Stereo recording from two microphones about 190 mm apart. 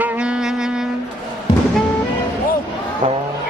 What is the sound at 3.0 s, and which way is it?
Vehicle, 30° right (ahead or behind).